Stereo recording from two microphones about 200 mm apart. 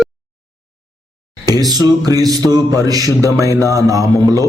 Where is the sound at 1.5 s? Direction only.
20° right (ahead or behind).